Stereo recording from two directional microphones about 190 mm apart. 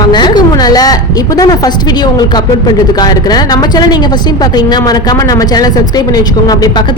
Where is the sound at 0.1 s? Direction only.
25° left (ahead or behind).